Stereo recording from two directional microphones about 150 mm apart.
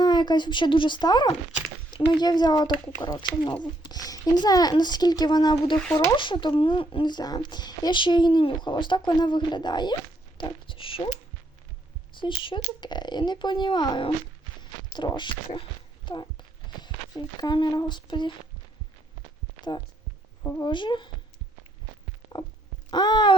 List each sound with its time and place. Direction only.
0.0 s a woman's voice: 30° left (ahead or behind)
12.1 s a woman's voice: 35° left (ahead or behind)
20.4 s speech: 20° left (ahead or behind)
20.7 s a woman's voice: 30° left (ahead or behind)
22.9 s speech: 30° left (ahead or behind)